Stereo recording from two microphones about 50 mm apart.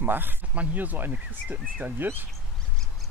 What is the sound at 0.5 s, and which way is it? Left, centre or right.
Speech, right.